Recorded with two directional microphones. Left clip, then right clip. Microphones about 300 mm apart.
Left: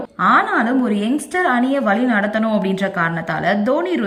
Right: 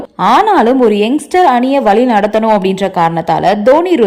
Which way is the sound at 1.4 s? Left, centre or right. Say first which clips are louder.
Right 7 dB; right.